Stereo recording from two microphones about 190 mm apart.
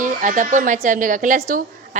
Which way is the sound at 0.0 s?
45° right (ahead or behind).